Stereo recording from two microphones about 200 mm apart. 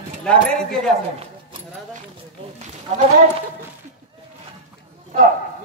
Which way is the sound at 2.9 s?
30° right (ahead or behind).